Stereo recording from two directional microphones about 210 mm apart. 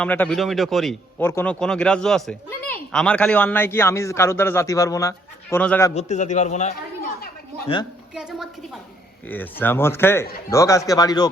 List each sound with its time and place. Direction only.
0.0 s speech: 5° left (ahead or behind)
1.2 s speech: 10° left (ahead or behind)
5.9 s a man's voice: 35° left (ahead or behind)
8.1 s a sound: 5° right (ahead or behind)
9.2 s speech: 10° left (ahead or behind)